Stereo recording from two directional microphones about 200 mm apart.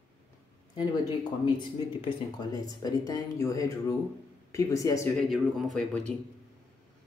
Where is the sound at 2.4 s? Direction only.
20° left (ahead or behind).